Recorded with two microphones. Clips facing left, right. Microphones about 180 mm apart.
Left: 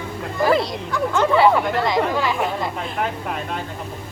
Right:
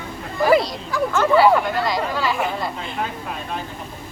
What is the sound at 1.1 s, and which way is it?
Speech, 20° left (ahead or behind).